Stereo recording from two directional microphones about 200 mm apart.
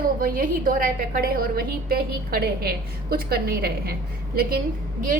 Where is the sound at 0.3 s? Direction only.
45° right (ahead or behind).